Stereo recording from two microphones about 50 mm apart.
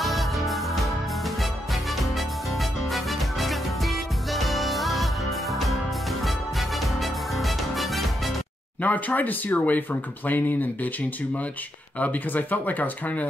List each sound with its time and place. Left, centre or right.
0.0 s music: centre
2.9 s music: centre
7.0 s music: centre
8.8 s speech: left
12.0 s speech: left